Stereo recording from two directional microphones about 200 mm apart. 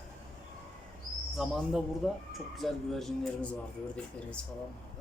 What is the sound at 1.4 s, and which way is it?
A man's voice, centre (ahead or behind).